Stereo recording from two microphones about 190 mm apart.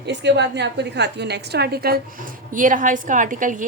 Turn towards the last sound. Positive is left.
turn(degrees=-45)  # may be behind; listen again after turning